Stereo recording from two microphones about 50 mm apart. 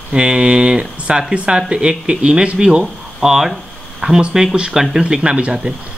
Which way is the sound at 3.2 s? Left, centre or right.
Centre.